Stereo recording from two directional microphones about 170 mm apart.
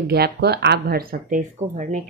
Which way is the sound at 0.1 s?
70° right (ahead or behind).